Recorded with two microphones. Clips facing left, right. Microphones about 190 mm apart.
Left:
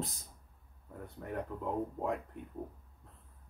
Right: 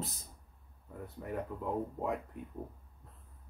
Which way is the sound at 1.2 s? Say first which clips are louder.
Right 1 dB; 5° right (ahead or behind).